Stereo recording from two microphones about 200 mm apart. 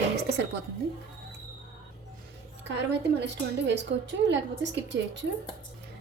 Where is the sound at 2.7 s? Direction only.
60° right (ahead or behind).